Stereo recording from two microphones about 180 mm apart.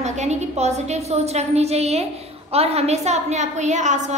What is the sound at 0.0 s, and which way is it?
A woman's voice, 40° right (ahead or behind).